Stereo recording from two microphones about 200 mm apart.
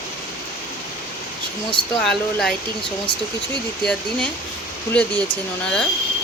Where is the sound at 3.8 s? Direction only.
5° left (ahead or behind).